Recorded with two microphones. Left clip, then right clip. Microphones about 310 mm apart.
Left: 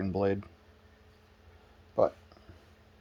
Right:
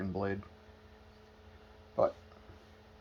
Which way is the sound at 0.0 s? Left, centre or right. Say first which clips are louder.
Left 7 dB; left.